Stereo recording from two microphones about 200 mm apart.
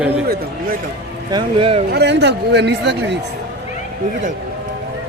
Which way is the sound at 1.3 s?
25° right (ahead or behind).